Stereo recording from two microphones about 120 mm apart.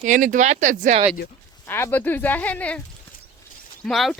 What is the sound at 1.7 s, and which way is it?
Speech, 15° left (ahead or behind).